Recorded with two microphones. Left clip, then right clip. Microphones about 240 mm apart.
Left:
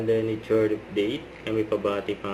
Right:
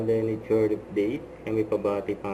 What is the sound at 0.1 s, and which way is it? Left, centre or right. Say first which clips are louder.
Speech: left 1 dB; centre.